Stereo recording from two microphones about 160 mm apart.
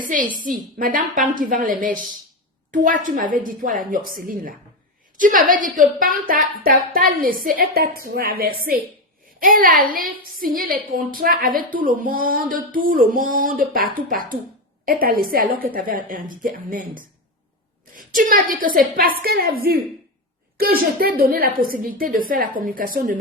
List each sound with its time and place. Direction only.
0.0 s a woman's voice: 55° right (ahead or behind)